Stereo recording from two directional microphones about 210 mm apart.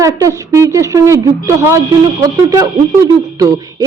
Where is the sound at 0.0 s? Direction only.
15° right (ahead or behind).